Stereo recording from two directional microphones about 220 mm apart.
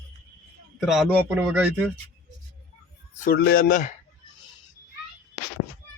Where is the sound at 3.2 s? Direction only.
45° left (ahead or behind).